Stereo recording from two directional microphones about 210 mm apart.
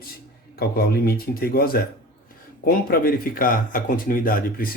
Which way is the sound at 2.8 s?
45° left (ahead or behind).